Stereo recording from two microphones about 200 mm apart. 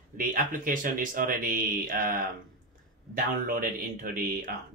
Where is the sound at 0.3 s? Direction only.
45° right (ahead or behind).